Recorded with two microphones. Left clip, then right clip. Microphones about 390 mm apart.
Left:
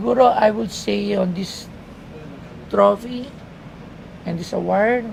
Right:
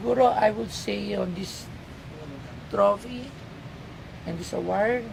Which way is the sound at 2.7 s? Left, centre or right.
Left.